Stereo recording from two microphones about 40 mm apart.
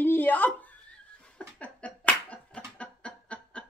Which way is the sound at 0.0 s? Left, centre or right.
Left.